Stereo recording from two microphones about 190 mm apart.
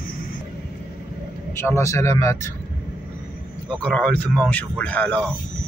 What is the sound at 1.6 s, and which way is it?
Speech, 15° left (ahead or behind).